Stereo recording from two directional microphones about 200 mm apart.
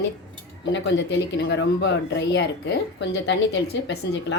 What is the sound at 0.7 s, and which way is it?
Speech, 60° left (ahead or behind).